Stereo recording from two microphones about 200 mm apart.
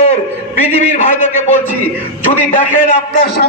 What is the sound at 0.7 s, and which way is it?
Speech, 35° left (ahead or behind).